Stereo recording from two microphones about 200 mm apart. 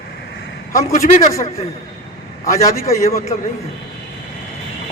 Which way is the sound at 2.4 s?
15° left (ahead or behind).